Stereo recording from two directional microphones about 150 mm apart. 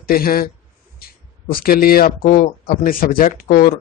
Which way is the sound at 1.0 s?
85° left.